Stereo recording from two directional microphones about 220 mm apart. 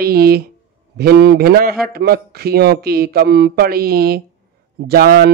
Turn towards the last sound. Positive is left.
turn(degrees=-45)  # may be behind; listen again after turning